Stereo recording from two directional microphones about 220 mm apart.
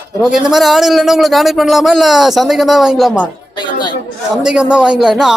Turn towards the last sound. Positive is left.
turn(degrees=0)  # may be behind; listen again after turning